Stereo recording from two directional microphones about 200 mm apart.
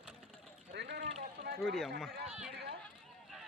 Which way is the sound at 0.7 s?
55° right (ahead or behind).